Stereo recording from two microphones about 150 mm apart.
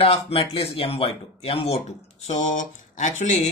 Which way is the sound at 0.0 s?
40° left (ahead or behind).